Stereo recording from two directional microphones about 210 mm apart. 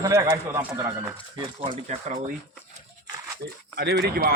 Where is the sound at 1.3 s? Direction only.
25° right (ahead or behind).